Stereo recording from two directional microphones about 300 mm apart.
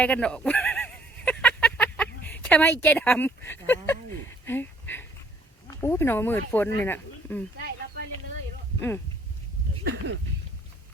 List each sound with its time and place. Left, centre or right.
0.0 s a sound: centre
2.2 s speech: centre
9.8 s speech: right